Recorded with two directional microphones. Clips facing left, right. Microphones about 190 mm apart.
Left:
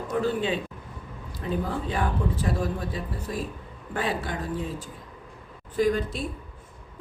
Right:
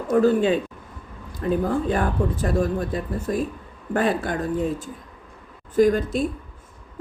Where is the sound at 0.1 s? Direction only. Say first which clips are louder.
Right 8 dB; 45° right (ahead or behind).